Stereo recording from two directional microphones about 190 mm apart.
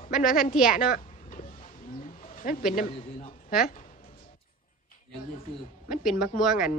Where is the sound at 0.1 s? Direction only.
5° right (ahead or behind).